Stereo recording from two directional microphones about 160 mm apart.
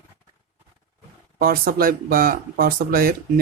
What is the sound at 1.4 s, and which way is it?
Speech, 65° right (ahead or behind).